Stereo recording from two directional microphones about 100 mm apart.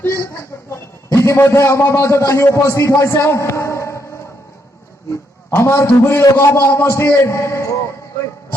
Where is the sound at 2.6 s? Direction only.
30° left (ahead or behind).